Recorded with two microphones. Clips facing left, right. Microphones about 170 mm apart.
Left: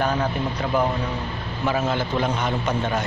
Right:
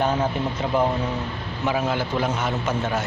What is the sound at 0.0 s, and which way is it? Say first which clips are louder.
Speech: right 1 dB; 25° right (ahead or behind).